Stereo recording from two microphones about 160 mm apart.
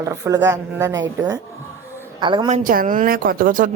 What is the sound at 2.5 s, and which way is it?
Speech, 50° right (ahead or behind).